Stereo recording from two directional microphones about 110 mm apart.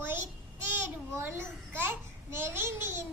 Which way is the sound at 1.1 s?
20° right (ahead or behind).